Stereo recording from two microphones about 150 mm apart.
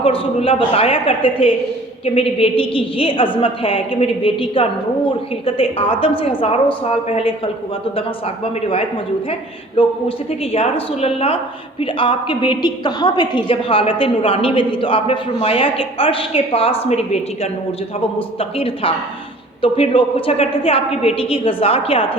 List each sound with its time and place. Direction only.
0.0 s a woman's voice: 40° left (ahead or behind)
9.7 s a woman's voice: 40° left (ahead or behind)